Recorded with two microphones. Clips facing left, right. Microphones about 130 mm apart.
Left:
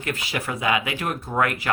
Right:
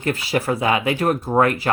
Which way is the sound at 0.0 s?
35° right (ahead or behind).